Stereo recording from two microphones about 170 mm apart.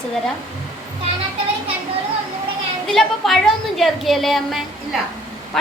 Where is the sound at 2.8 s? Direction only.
Centre (ahead or behind).